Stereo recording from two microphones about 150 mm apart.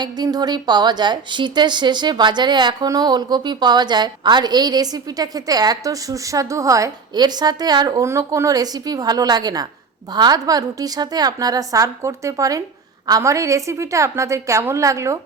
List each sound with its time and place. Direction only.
0.0 s a woman's voice: 25° right (ahead or behind)